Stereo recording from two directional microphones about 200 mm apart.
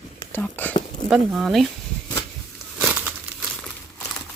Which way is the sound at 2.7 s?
10° right (ahead or behind).